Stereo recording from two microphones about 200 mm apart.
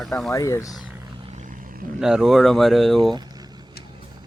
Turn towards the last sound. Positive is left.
turn(degrees=0)  # may be behind; listen again after turning